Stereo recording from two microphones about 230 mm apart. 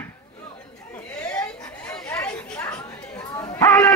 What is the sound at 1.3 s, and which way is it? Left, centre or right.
Chatter, centre.